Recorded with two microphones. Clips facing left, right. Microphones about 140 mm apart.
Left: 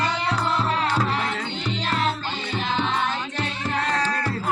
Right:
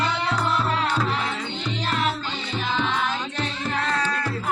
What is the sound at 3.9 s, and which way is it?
Music, 40° left (ahead or behind).